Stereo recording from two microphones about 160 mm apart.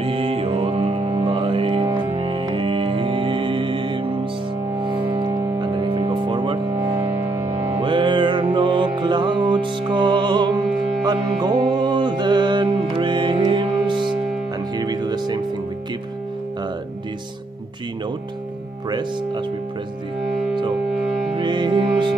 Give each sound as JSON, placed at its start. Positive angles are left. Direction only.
{"t": 0.0, "sound": "music", "side_deg": -35}
{"t": 1.9, "sound": "music", "side_deg": -20}
{"t": 7.2, "sound": "music", "side_deg": -20}
{"t": 7.8, "sound": "music", "side_deg": -30}
{"t": 18.9, "sound": "music", "side_deg": -25}
{"t": 21.3, "sound": "music", "side_deg": -30}